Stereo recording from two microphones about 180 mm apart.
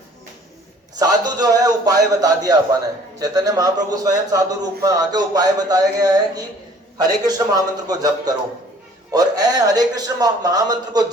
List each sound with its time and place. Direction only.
0.9 s a man's voice: 20° right (ahead or behind)